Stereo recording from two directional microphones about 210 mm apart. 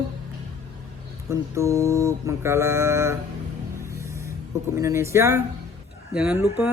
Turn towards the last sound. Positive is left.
turn(degrees=-10)  # may be behind; listen again after turning